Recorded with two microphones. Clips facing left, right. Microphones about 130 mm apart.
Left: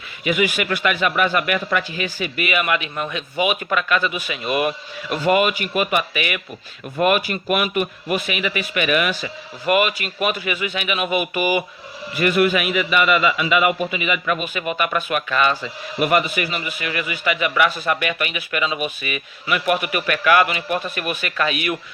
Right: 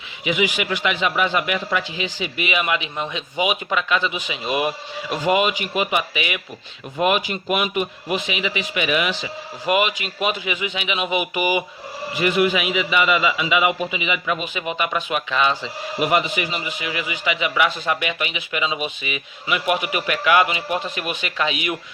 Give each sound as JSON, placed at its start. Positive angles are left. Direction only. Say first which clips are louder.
{"t": 0.3, "sound": "a man's voice", "louder": "left 1 dB", "side_deg": -15}